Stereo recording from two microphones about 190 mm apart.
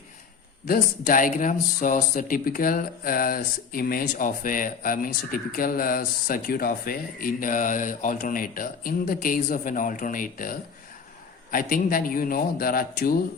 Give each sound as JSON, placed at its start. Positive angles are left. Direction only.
{"t": 0.7, "sound": "speech", "side_deg": 45}